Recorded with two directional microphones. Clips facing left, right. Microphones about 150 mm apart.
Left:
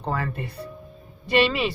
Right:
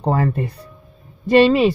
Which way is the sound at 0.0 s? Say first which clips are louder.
Right 9 dB; 40° right (ahead or behind).